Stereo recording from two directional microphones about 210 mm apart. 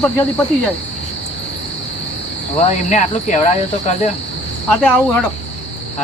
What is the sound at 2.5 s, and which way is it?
Speech, 35° left (ahead or behind).